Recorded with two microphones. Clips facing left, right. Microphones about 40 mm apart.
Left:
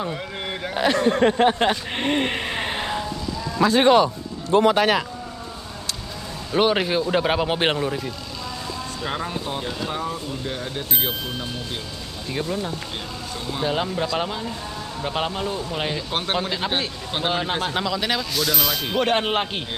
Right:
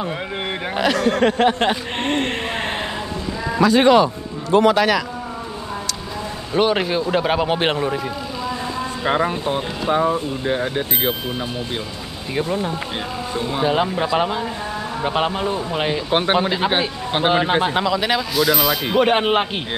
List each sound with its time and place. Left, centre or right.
0.9 s speech: right
4.5 s speech: right
6.5 s a man's voice: centre
7.8 s speech: centre
9.0 s speech: right